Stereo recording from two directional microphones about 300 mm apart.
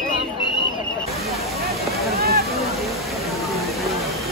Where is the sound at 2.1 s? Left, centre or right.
Right.